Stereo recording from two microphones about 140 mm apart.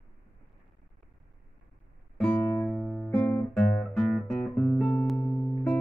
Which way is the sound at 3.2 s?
10° left (ahead or behind).